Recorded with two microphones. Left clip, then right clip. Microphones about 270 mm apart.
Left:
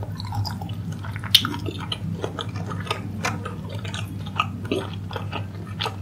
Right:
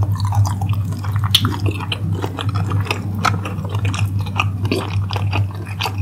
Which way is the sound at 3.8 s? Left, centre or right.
Centre.